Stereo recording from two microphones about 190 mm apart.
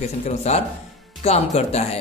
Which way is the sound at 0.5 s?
35° left (ahead or behind).